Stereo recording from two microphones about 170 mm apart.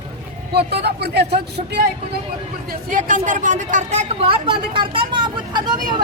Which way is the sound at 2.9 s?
50° right (ahead or behind).